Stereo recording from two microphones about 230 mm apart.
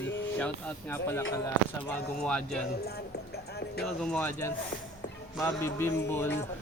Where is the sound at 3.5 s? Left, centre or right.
Left.